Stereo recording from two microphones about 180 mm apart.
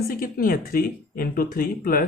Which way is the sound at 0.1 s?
55° left (ahead or behind).